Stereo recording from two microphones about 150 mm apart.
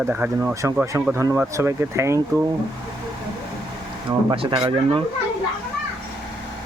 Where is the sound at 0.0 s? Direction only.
10° right (ahead or behind).